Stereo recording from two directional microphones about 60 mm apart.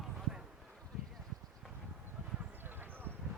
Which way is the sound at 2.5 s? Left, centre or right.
Right.